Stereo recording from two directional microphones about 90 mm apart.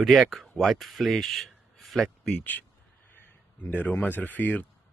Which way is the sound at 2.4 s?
20° left (ahead or behind).